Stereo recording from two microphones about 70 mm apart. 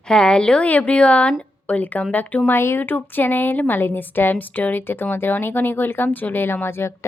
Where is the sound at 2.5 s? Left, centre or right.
Left.